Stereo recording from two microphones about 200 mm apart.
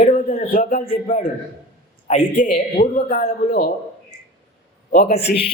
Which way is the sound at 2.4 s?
40° left (ahead or behind).